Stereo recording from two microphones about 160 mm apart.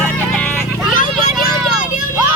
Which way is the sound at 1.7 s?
5° right (ahead or behind).